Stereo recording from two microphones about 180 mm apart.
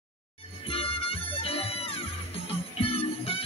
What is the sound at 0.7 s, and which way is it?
Music, 30° left (ahead or behind).